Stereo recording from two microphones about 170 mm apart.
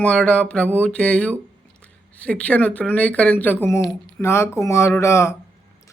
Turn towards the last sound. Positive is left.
turn(degrees=15)  # may be behind; listen again after turning